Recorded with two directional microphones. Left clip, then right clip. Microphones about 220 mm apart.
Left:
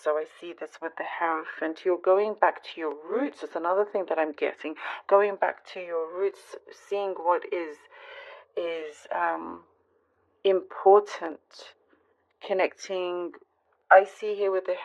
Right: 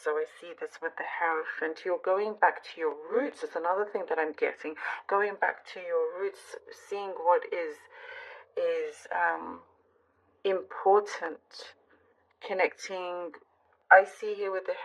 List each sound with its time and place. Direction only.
0.0 s speech: 45° left (ahead or behind)